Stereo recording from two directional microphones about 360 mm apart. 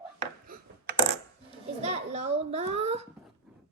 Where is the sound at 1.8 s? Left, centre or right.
Centre.